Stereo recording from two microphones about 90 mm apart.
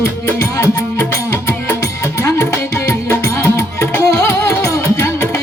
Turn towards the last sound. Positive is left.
turn(degrees=35)  # may be behind; listen again after turning